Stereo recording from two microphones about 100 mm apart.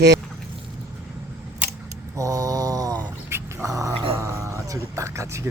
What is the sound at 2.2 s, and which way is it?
Mantra, 35° right (ahead or behind).